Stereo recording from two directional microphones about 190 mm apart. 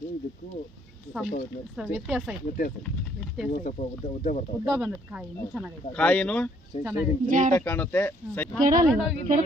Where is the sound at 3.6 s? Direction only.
40° left (ahead or behind).